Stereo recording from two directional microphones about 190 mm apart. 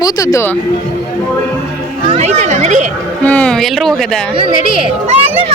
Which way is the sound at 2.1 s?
35° right (ahead or behind).